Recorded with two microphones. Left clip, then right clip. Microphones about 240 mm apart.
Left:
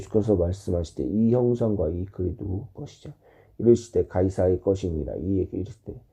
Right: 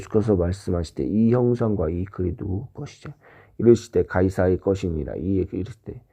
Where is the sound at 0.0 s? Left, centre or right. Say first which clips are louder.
Right 1 dB; right.